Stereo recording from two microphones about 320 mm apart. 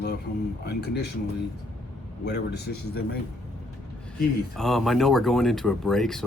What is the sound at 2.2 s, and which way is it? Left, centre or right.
Speech, left.